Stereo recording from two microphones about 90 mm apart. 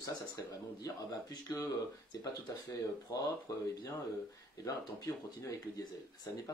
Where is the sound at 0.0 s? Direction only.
45° left (ahead or behind).